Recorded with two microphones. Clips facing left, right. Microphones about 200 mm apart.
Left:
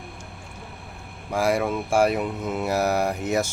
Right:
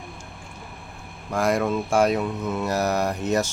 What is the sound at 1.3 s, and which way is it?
Mantra, 10° left (ahead or behind).